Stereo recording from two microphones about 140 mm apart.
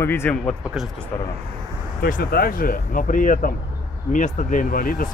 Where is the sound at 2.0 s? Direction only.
90° left.